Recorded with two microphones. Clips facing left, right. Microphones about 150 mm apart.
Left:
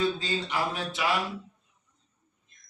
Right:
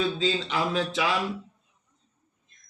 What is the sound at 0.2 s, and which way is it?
Speech, 90° right.